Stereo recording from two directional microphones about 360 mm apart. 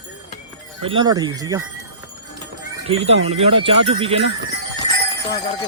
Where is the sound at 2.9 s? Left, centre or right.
Centre.